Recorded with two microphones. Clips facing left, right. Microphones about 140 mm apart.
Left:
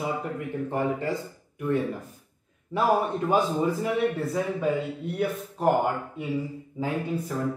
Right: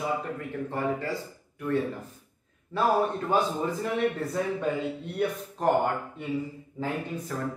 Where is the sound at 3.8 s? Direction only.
5° left (ahead or behind).